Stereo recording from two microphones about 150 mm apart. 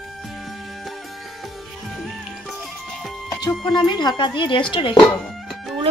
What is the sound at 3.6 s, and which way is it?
Speech, 30° left (ahead or behind).